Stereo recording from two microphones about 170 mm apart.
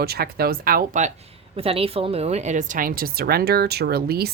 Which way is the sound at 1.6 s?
35° right (ahead or behind).